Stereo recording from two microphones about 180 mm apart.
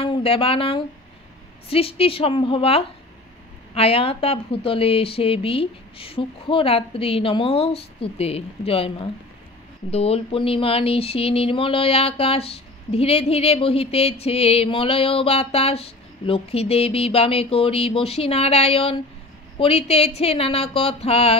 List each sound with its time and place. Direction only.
0.0 s speech: 30° left (ahead or behind)